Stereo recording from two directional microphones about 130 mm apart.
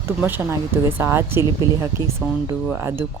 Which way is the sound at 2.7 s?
20° right (ahead or behind).